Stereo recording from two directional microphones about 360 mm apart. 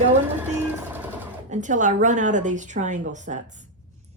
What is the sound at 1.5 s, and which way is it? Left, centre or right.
A woman's voice, centre.